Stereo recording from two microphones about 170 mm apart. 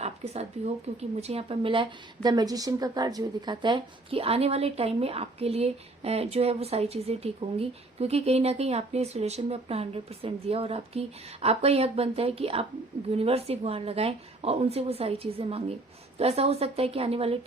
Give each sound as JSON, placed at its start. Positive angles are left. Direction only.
{"t": 0.0, "sound": "speech", "side_deg": -40}